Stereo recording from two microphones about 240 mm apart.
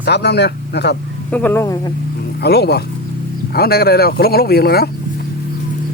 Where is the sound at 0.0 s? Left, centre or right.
Left.